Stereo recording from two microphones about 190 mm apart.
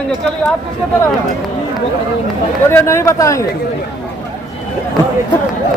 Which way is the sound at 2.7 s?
15° left (ahead or behind).